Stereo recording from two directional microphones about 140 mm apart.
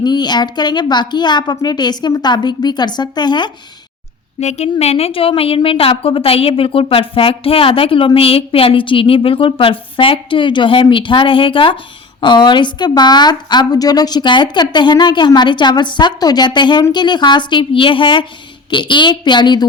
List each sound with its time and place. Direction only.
0.0 s a woman's voice: 30° left (ahead or behind)
4.4 s a woman's voice: 50° left (ahead or behind); by 19.6 s 30° left (ahead or behind)